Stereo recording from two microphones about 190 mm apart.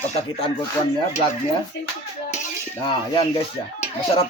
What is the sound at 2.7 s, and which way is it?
Speech, 25° left (ahead or behind).